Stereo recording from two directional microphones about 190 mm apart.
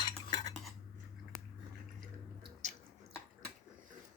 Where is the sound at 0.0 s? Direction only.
25° left (ahead or behind).